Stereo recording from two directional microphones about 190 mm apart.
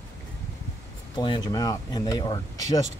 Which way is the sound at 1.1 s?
25° left (ahead or behind).